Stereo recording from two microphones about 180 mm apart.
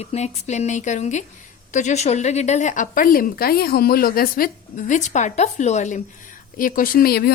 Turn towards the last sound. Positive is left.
turn(degrees=60)  # may be behind; listen again after turning